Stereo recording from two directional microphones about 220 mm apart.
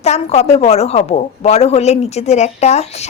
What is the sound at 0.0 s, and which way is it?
A woman's voice, 30° left (ahead or behind).